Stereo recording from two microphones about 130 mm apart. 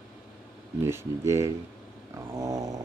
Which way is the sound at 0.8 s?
20° right (ahead or behind).